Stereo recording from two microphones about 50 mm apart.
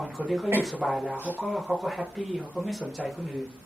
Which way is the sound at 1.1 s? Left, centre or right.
Right.